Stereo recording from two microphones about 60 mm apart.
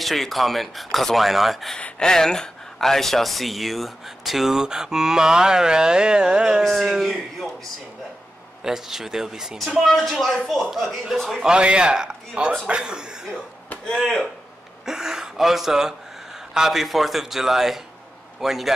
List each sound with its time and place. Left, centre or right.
0.0 s speech: centre
1.8 s speech: left
2.0 s speech: centre
8.6 s speech: centre
9.7 s speech: centre
11.4 s speech: centre
13.8 s speech: centre
14.9 s speech: centre